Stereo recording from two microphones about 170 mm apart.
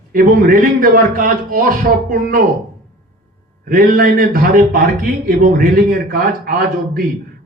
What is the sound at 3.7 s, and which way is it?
A man's voice, 55° right (ahead or behind).